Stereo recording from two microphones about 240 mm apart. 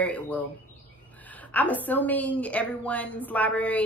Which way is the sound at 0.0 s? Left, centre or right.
Centre.